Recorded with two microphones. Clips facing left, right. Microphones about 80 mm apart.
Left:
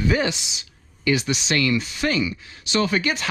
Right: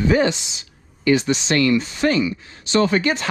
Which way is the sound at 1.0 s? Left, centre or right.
Right.